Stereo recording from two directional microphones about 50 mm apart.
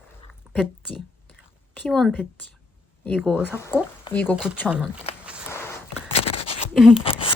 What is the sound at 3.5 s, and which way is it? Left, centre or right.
Speech, left.